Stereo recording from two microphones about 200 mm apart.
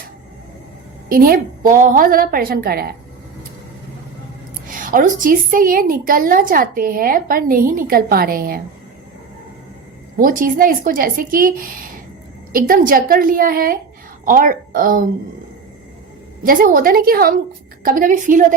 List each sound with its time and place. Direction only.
1.1 s a woman's voice: 45° right (ahead or behind)
4.7 s a woman's voice: 45° right (ahead or behind)
10.2 s a woman's voice: 45° right (ahead or behind)
16.4 s a woman's voice: 45° right (ahead or behind)